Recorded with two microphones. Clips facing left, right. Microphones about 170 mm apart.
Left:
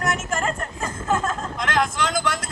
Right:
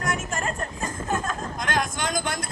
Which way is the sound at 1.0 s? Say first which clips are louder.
Left 5 dB; 80° left.